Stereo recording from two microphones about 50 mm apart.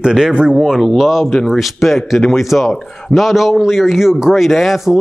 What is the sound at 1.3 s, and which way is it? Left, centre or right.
Speech, centre.